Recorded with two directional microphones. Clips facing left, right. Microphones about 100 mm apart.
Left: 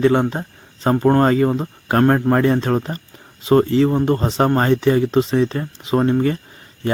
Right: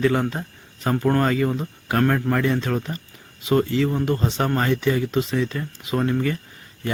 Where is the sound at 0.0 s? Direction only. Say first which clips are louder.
Left 5 dB; 30° left (ahead or behind).